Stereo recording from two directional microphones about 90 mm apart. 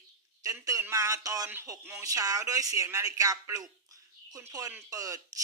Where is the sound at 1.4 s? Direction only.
25° right (ahead or behind); by 3.7 s 40° right (ahead or behind).